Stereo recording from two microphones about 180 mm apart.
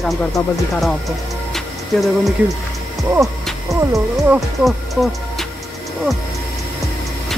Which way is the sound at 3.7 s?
Centre (ahead or behind).